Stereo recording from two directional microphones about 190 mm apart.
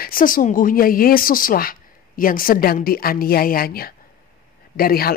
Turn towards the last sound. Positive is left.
turn(degrees=50)  # may be behind; listen again after turning